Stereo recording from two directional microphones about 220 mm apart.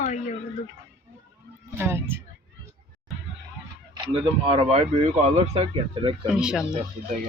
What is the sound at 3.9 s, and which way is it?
Speech, 25° right (ahead or behind).